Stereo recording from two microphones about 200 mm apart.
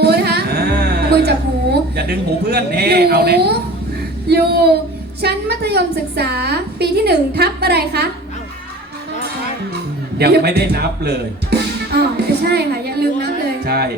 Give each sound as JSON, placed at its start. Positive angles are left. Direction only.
{"t": 0.0, "sound": "music", "side_deg": -55}
{"t": 2.0, "sound": "a woman's voice", "side_deg": -50}
{"t": 10.2, "sound": "a woman's voice", "side_deg": -55}
{"t": 11.9, "sound": "music", "side_deg": -55}